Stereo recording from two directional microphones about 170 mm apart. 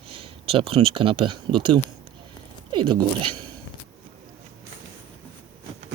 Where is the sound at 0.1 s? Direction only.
30° right (ahead or behind).